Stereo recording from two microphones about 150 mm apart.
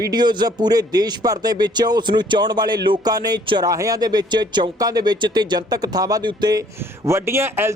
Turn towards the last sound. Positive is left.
turn(degrees=-15)  # may be behind; listen again after turning